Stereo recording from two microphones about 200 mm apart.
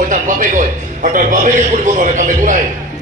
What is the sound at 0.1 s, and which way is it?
A man's voice, 40° right (ahead or behind).